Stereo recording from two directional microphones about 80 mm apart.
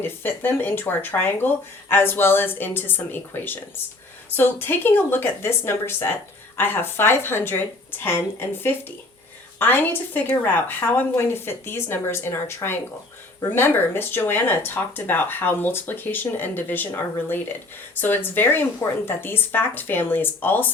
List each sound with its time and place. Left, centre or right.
0.0 s speech: left